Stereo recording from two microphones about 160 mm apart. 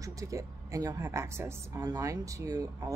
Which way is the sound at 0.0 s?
20° right (ahead or behind).